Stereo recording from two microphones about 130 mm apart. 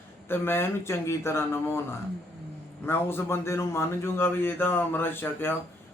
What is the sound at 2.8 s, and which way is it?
A man's voice, 15° left (ahead or behind).